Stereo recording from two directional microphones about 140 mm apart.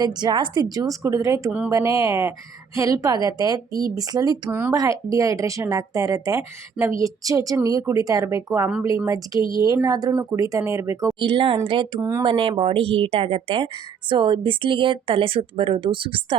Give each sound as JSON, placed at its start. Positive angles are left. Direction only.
{"t": 0.0, "sound": "a woman's voice", "side_deg": -30}
{"t": 1.5, "sound": "speech", "side_deg": -10}
{"t": 1.7, "sound": "a woman's voice", "side_deg": -20}
{"t": 4.4, "sound": "a woman's voice", "side_deg": -15}
{"t": 11.2, "sound": "speech", "side_deg": -40}
{"t": 11.9, "sound": "a woman's voice", "side_deg": -20}
{"t": 12.2, "sound": "speech", "side_deg": -40}